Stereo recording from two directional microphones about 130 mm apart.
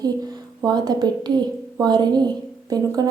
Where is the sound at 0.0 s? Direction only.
30° right (ahead or behind).